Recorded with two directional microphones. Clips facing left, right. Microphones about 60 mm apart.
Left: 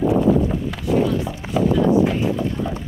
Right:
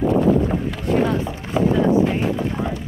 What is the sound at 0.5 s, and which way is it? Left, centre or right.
Boat, right.